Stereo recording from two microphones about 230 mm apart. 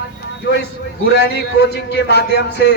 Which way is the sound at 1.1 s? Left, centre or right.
Left.